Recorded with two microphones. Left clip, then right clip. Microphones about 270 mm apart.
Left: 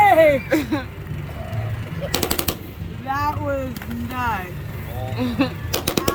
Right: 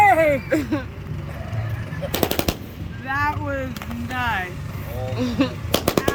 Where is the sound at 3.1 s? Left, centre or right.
Left.